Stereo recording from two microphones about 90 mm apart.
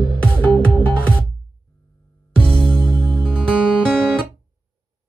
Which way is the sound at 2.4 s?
10° left (ahead or behind).